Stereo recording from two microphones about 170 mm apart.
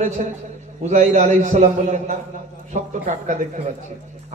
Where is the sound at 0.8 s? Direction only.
45° right (ahead or behind).